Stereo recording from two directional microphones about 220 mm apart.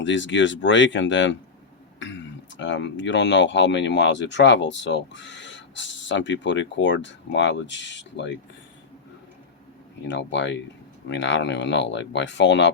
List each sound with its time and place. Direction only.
0.0 s speech: 55° left (ahead or behind)
10.1 s speech: 55° left (ahead or behind)